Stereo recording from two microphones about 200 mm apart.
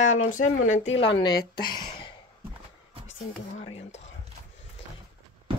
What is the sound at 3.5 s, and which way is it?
Speech, 35° left (ahead or behind).